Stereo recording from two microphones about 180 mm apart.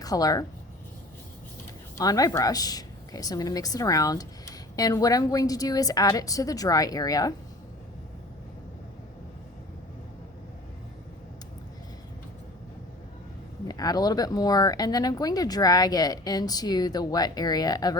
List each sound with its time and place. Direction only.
0.0 s speech: 20° left (ahead or behind)
2.0 s speech: 20° left (ahead or behind)
13.7 s speech: 20° left (ahead or behind)